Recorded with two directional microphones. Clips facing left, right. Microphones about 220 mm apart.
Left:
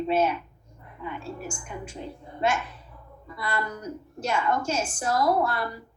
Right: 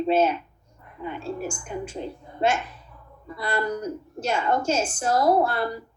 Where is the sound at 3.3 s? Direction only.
30° right (ahead or behind).